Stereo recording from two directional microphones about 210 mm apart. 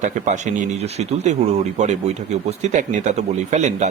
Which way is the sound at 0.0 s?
35° right (ahead or behind).